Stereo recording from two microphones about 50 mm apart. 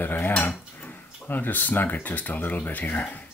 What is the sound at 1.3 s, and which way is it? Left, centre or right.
Speech, left.